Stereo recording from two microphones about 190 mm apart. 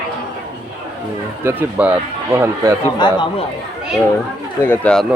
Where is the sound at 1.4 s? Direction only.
10° right (ahead or behind).